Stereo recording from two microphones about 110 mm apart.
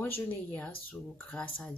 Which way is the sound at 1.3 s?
15° left (ahead or behind).